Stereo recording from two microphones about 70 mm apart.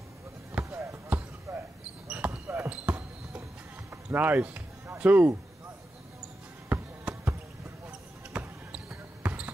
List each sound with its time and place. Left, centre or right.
0.6 s basketball bounce: right
1.5 s basketball bounce: right
2.0 s basketball bounce: centre
3.9 s speech: right
6.7 s basketball bounce: right